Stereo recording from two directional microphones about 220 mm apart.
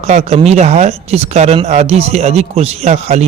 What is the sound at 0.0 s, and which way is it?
A man's voice, 30° right (ahead or behind).